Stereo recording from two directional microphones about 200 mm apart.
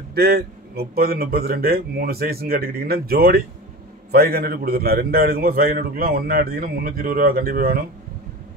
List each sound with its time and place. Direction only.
0.1 s a man's voice: 50° right (ahead or behind)